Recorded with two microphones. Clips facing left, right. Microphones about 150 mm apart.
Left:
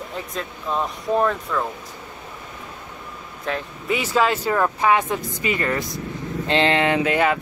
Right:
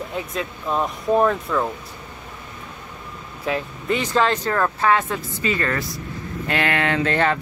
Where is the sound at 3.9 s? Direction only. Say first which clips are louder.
Even; 5° left (ahead or behind).